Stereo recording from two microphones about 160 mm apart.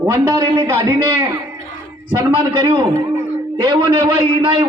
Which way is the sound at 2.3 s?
35° right (ahead or behind).